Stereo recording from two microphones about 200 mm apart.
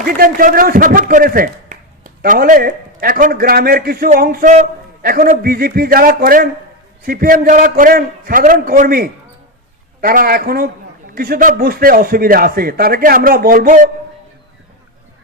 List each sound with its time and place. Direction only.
0.0 s a man's voice: 45° right (ahead or behind)